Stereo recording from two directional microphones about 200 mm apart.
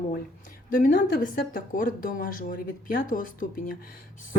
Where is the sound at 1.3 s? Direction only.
45° left (ahead or behind).